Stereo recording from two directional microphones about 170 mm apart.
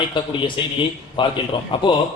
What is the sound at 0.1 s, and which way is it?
A man's voice, 30° left (ahead or behind).